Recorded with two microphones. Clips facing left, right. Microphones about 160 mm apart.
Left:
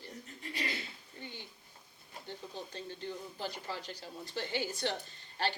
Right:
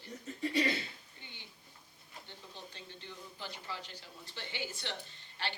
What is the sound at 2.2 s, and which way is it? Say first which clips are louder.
A woman's voice: left 8 dB; 40° left (ahead or behind).